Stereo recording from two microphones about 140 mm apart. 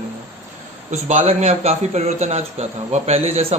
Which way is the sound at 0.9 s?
55° right (ahead or behind).